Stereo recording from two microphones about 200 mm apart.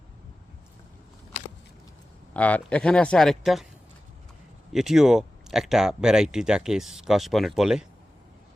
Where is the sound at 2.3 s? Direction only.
5° left (ahead or behind).